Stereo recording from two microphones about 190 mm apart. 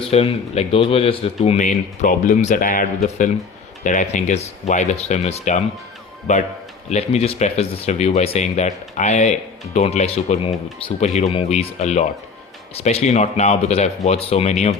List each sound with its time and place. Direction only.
0.1 s speech: 30° left (ahead or behind)